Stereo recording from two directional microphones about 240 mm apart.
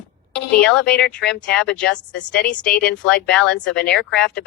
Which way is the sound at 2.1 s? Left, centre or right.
Left.